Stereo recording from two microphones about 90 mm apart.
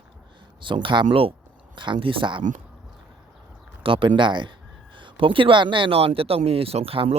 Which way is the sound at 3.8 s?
70° right (ahead or behind).